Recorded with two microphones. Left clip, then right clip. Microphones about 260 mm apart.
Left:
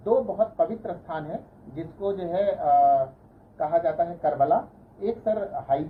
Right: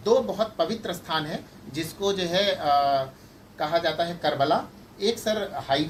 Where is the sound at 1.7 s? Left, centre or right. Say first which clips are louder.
Right 2 dB; right.